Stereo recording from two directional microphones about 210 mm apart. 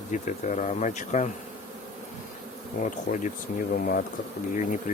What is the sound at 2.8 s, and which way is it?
Speech, 35° left (ahead or behind).